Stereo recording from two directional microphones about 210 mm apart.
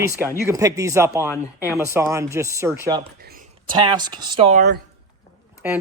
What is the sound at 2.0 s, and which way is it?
Speech, 15° right (ahead or behind).